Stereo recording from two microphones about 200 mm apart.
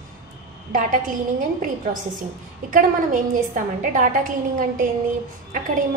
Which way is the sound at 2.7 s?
40° right (ahead or behind).